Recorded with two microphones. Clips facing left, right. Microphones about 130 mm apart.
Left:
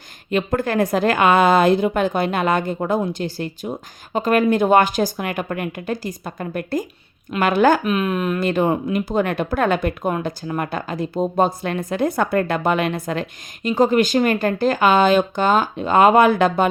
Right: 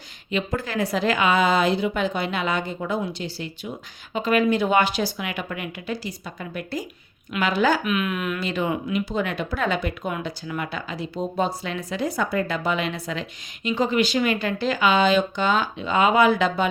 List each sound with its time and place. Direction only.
0.3 s speech: 50° left (ahead or behind)
7.9 s speech: 35° left (ahead or behind)
8.4 s speech: 50° left (ahead or behind)